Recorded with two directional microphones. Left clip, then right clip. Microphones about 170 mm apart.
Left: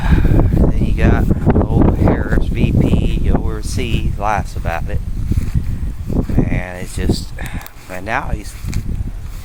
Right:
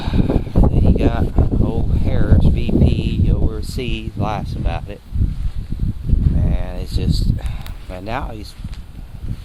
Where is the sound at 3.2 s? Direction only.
10° right (ahead or behind).